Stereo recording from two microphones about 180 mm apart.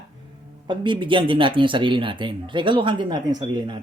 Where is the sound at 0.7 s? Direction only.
25° right (ahead or behind).